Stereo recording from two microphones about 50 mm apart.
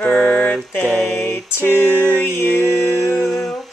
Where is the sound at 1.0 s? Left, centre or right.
Left.